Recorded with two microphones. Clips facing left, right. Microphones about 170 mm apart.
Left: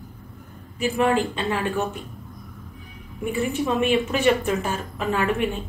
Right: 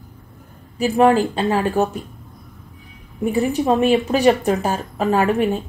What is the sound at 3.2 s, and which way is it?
Speech, 40° right (ahead or behind).